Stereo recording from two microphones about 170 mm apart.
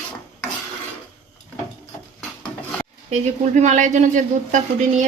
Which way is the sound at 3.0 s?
45° right (ahead or behind).